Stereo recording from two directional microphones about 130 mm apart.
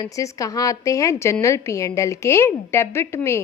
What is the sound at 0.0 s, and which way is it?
A woman's voice, 25° left (ahead or behind).